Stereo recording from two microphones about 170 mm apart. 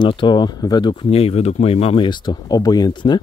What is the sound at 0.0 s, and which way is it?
Speech, 30° left (ahead or behind).